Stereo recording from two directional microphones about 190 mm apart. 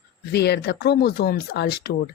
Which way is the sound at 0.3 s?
60° left (ahead or behind).